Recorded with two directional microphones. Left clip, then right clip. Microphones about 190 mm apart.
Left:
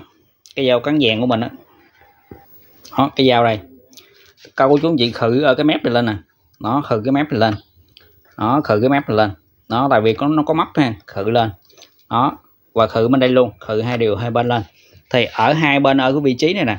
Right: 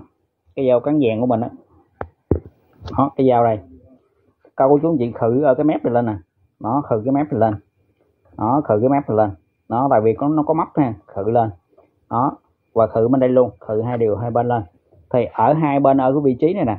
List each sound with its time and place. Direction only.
0.6 s speech: 15° left (ahead or behind)
3.0 s speech: 20° left (ahead or behind)
4.8 s speech: 20° left (ahead or behind)
12.1 s a sound: 20° left (ahead or behind)
13.0 s speech: 20° left (ahead or behind)